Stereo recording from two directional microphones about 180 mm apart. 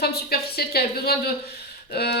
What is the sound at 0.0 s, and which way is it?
Speech, 60° left (ahead or behind).